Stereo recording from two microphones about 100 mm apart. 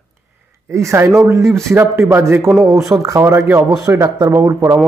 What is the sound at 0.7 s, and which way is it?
Speech, 30° right (ahead or behind).